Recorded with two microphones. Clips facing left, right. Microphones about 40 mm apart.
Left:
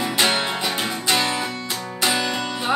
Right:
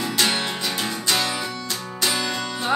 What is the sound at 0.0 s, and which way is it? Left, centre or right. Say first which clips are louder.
Music: left 2 dB; left.